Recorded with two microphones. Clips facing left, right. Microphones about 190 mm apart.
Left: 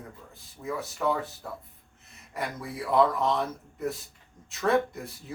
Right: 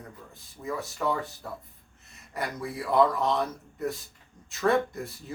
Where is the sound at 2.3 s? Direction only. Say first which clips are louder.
Right 1 dB; centre (ahead or behind).